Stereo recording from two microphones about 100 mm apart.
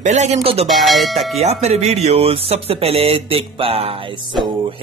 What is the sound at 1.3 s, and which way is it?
Speech, 90° right.